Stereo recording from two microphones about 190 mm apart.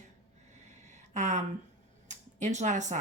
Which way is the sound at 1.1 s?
40° right (ahead or behind).